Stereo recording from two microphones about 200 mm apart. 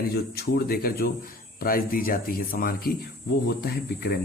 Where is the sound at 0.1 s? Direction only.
50° left (ahead or behind).